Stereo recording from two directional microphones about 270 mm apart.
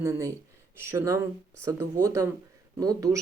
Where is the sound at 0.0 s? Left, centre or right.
Centre.